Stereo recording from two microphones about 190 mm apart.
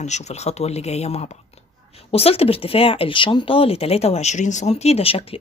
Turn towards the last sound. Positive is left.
turn(degrees=30)  # may be behind; listen again after turning